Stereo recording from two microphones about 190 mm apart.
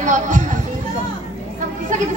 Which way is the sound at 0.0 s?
40° right (ahead or behind).